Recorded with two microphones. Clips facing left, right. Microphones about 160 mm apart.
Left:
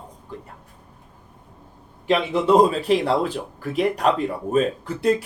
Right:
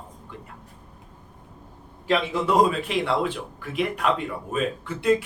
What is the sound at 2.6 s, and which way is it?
Speech, 35° left (ahead or behind).